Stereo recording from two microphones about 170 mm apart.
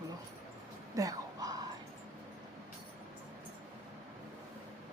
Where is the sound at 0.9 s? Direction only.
20° right (ahead or behind).